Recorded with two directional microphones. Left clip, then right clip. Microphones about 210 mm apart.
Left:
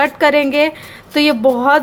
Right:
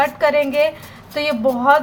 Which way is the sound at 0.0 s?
50° left (ahead or behind).